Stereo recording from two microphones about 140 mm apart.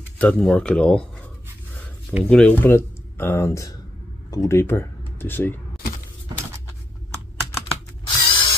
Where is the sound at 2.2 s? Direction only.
5° left (ahead or behind).